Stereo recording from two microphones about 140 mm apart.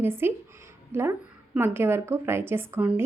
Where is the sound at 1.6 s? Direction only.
15° right (ahead or behind).